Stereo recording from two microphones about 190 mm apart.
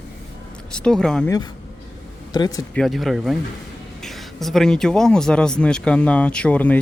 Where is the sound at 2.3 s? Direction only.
20° left (ahead or behind).